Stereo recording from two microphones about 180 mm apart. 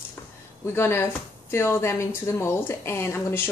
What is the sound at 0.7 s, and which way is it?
Speech, 15° left (ahead or behind).